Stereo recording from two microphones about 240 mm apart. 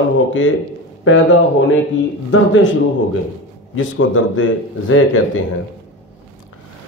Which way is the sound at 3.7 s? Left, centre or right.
Left.